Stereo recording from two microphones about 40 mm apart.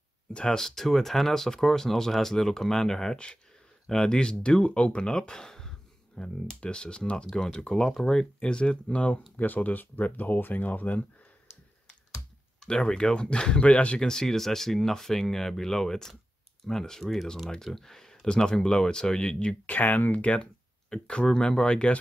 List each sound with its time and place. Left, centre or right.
0.3 s speech: left
0.6 s speech: centre
7.2 s speech: centre
7.5 s speech: left
7.8 s speech: centre
9.4 s speech: left
12.6 s speech: left
13.9 s speech: centre
19.6 s speech: left
20.9 s speech: left